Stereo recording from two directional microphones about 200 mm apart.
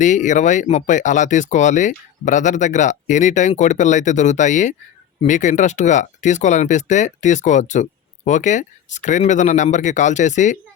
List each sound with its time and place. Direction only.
0.0 s speech: 40° left (ahead or behind)